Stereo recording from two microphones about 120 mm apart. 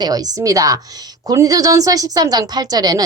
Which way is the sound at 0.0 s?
30° right (ahead or behind).